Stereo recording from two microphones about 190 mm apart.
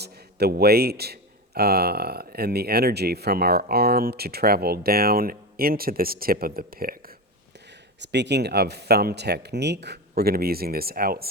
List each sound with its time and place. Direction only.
0.0 s a man's voice: 60° right (ahead or behind)
7.9 s a man's voice: 65° right (ahead or behind)